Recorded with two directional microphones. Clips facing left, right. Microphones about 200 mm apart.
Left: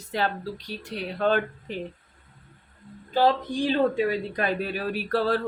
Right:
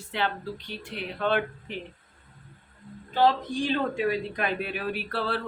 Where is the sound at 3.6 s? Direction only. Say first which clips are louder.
Left 5 dB; 35° left (ahead or behind).